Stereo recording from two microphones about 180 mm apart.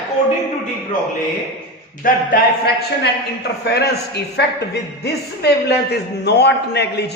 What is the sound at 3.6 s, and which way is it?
A man's voice, 65° left (ahead or behind).